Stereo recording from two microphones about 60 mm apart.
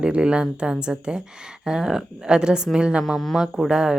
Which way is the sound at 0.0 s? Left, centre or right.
Centre.